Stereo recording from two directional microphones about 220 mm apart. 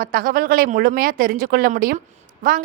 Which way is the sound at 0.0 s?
40° right (ahead or behind).